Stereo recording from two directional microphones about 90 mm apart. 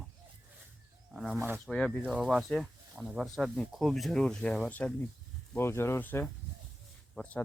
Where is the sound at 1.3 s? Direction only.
25° right (ahead or behind).